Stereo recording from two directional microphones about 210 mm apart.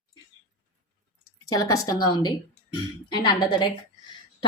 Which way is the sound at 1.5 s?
15° left (ahead or behind).